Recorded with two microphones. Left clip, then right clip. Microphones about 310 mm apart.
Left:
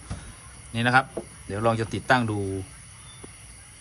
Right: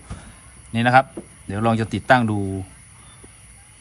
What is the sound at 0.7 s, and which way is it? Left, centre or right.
Speech, right.